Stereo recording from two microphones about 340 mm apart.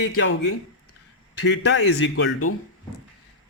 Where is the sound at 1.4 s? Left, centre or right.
Left.